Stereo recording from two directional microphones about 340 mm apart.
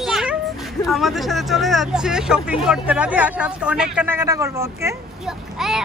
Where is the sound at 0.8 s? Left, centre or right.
Centre.